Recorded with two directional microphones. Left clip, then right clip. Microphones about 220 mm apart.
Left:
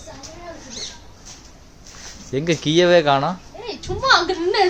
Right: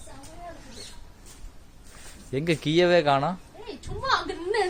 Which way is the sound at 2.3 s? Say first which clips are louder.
Left 6 dB; 15° right (ahead or behind).